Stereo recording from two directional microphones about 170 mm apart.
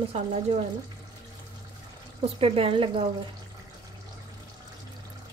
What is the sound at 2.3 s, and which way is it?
Speech, 35° right (ahead or behind).